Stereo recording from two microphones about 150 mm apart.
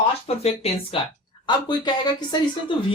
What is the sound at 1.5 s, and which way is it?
Speech, 30° left (ahead or behind).